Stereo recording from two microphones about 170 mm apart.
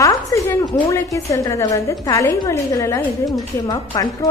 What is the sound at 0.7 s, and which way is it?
A woman's voice, 15° left (ahead or behind).